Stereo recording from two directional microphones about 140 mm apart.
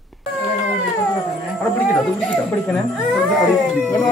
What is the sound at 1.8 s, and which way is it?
Speech, 5° left (ahead or behind).